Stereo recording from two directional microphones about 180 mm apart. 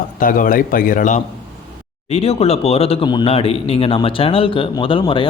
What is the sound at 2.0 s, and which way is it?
Speech, 35° left (ahead or behind).